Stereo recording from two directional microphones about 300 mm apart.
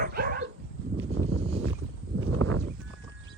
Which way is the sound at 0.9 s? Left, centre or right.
Right.